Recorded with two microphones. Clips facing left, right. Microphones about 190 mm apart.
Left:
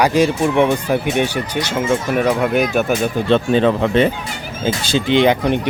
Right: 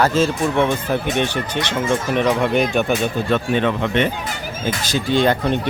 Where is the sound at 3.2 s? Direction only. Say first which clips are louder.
Left 7 dB; 30° left (ahead or behind).